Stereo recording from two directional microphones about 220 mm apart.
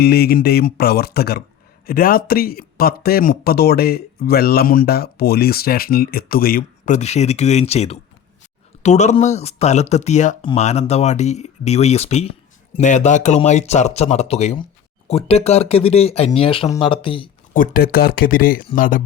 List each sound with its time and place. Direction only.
0.0 s speech: 45° left (ahead or behind); by 17.2 s 20° left (ahead or behind)
17.5 s speech: 40° left (ahead or behind)